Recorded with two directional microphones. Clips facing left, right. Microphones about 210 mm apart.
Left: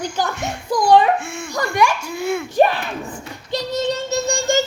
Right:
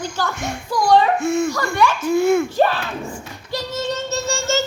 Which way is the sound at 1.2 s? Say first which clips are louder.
Right 12 dB; 40° right (ahead or behind).